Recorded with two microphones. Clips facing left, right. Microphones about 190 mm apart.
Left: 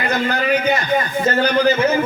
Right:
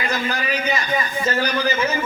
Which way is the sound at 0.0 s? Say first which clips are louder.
Left 5 dB; 60° left (ahead or behind).